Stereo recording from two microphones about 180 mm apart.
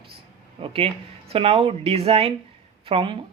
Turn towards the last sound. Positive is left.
turn(degrees=-30)  # may be behind; listen again after turning